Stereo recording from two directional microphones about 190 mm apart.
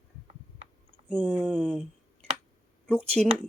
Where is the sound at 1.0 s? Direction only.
Centre (ahead or behind).